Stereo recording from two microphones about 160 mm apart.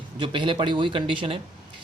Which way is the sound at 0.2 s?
30° right (ahead or behind).